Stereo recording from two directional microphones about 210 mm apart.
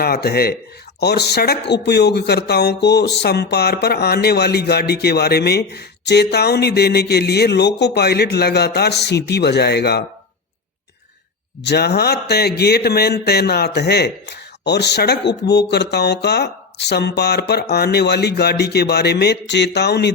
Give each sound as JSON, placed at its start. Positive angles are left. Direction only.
{"t": 0.0, "sound": "speech", "side_deg": 50}
{"t": 11.6, "sound": "speech", "side_deg": 50}